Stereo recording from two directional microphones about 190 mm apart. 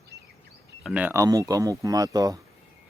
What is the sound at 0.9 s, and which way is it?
Speech, 5° right (ahead or behind).